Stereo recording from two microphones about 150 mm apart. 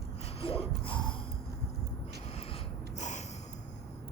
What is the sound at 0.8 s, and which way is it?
Gasp, 35° left (ahead or behind).